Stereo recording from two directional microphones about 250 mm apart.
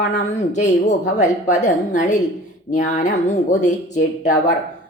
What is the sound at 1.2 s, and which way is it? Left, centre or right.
A woman's voice, left.